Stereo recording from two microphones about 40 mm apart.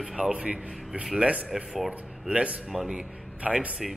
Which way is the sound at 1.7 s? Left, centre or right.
Centre.